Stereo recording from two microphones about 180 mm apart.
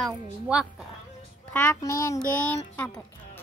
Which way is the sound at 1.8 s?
20° left (ahead or behind).